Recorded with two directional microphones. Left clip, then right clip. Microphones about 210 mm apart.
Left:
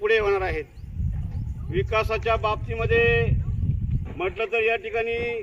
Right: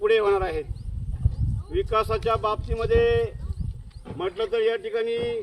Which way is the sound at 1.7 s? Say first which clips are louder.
Even; 10° left (ahead or behind).